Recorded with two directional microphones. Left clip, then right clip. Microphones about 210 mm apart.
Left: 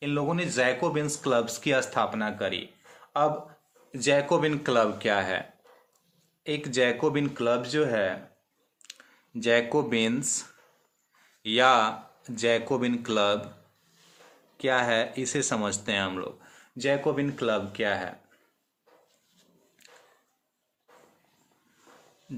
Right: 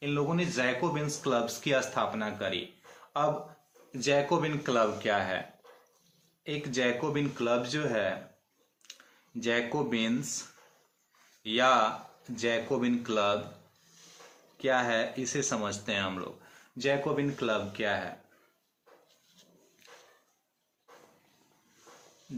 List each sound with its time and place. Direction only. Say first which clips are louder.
0.0 s speech: left 2 dB; 50° left (ahead or behind)
6.4 s speech: left 5 dB; 50° left (ahead or behind)
8.8 s clicking: left 3 dB; 50° left (ahead or behind)
9.4 s speech: left 6 dB; 55° left (ahead or behind)
11.4 s speech: left 4 dB; 50° left (ahead or behind)
14.6 s speech: left 3 dB; 55° left (ahead or behind)